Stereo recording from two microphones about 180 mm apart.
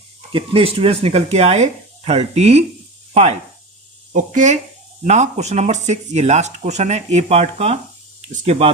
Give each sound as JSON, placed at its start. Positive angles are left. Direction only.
{"t": 0.3, "sound": "speech", "side_deg": -30}
{"t": 4.1, "sound": "speech", "side_deg": -45}